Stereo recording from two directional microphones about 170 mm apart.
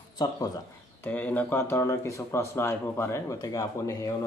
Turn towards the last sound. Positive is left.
turn(degrees=20)  # may be behind; listen again after turning